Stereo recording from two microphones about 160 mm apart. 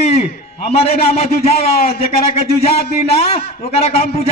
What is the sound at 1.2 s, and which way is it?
A man's voice, 40° left (ahead or behind).